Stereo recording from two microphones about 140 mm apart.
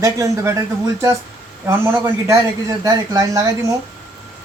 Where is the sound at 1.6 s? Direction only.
20° right (ahead or behind).